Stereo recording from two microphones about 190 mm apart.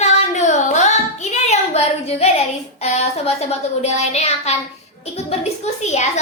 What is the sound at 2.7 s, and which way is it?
A child's voice, 35° left (ahead or behind).